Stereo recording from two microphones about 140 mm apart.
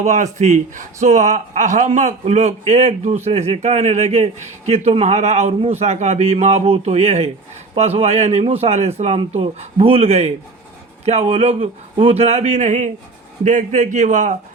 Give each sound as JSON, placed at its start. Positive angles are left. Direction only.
{"t": 0.0, "sound": "a man's voice", "side_deg": -60}